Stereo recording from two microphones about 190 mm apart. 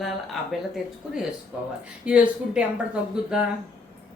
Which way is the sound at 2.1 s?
5° right (ahead or behind).